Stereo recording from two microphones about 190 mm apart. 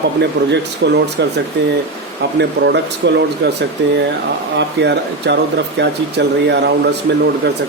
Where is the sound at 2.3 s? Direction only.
65° right (ahead or behind).